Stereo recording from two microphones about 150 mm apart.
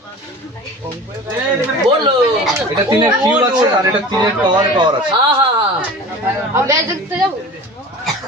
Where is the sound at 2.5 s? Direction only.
15° right (ahead or behind).